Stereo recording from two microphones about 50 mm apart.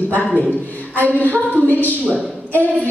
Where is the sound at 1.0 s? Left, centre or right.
Left.